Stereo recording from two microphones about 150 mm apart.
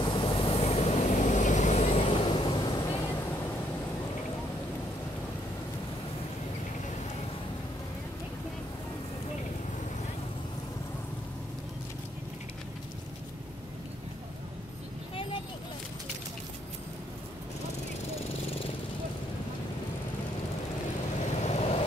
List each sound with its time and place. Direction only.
0.0 s vehicle: 35° left (ahead or behind)
21.4 s vehicle: 45° left (ahead or behind)